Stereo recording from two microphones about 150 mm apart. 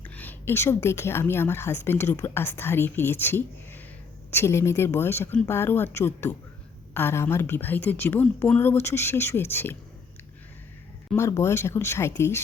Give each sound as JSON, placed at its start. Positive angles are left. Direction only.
{"t": 0.0, "sound": "a woman's voice", "side_deg": 10}
{"t": 11.2, "sound": "a woman's voice", "side_deg": 20}